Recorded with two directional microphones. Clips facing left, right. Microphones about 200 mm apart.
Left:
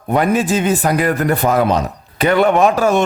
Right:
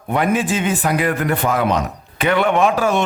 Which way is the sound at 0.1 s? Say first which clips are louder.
Left 3 dB; 40° left (ahead or behind).